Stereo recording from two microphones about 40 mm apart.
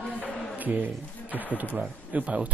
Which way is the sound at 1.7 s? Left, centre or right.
Right.